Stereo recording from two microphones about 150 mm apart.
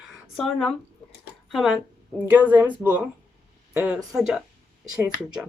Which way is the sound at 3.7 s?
5° right (ahead or behind).